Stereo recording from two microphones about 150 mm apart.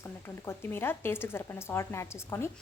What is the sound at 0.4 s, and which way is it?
A woman's voice, 15° left (ahead or behind).